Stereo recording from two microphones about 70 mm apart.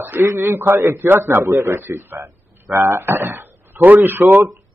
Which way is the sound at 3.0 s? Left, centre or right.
Right.